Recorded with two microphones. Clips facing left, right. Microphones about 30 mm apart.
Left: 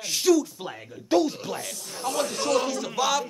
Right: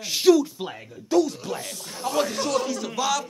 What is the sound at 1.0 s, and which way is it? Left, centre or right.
Speech, left.